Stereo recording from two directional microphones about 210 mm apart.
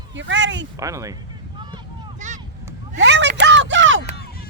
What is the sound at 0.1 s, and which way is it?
Speech, 60° right (ahead or behind).